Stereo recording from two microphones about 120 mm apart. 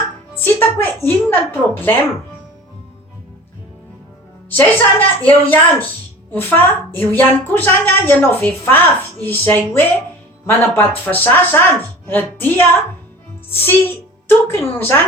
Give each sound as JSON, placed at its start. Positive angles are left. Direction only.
{"t": 0.4, "sound": "speech", "side_deg": 20}
{"t": 4.5, "sound": "a woman's voice", "side_deg": 15}